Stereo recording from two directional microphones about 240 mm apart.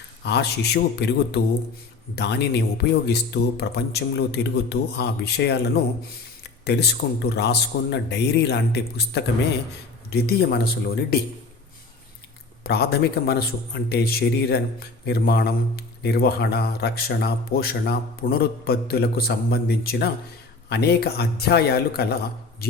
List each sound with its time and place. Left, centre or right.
0.3 s a man's voice: left
12.6 s a man's voice: left